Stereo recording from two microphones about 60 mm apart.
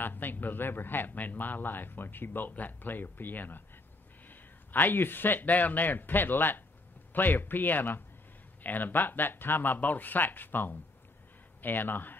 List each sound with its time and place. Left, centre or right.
0.0 s speech: left